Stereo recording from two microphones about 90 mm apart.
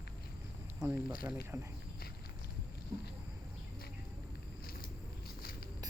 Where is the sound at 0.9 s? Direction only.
20° right (ahead or behind).